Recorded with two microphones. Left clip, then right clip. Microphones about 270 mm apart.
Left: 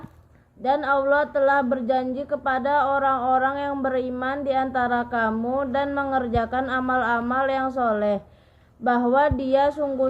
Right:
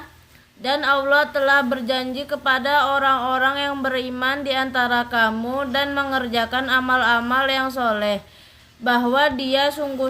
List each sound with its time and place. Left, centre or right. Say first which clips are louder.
0.6 s speech: right 2 dB; centre